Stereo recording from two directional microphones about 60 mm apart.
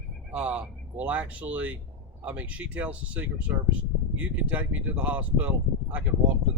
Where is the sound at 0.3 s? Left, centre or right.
Right.